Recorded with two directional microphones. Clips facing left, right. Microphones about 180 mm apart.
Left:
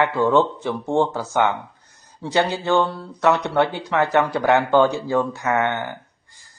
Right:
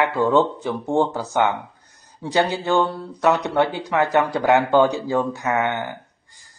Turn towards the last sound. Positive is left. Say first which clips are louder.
# left 1 dB
turn(degrees=-15)  # may be behind; listen again after turning